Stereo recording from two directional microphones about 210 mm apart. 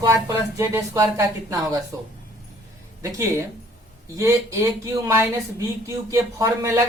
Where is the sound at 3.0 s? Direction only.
15° right (ahead or behind).